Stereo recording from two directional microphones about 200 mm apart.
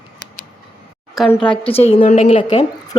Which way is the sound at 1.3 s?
5° left (ahead or behind).